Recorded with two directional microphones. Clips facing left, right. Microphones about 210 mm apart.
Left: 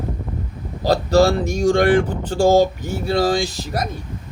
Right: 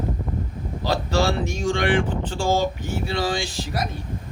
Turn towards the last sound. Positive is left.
turn(degrees=40)  # may be behind; listen again after turning